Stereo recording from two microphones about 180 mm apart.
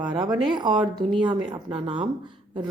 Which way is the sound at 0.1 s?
25° right (ahead or behind).